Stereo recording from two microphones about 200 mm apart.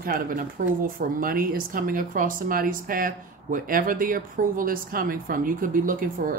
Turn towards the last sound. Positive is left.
turn(degrees=-45)  # may be behind; listen again after turning